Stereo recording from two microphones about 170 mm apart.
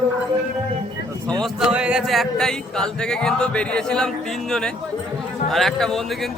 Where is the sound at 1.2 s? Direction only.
5° left (ahead or behind).